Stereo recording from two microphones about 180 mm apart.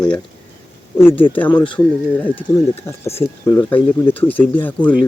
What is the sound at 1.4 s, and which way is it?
Speech, 10° left (ahead or behind).